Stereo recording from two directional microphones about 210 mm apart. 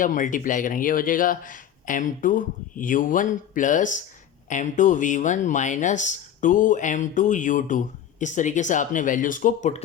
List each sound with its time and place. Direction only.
0.0 s speech: 40° left (ahead or behind)